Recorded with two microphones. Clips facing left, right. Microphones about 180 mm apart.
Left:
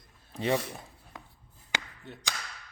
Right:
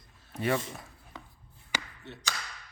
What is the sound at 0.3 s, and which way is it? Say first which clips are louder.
Speech: left 1 dB; 20° left (ahead or behind).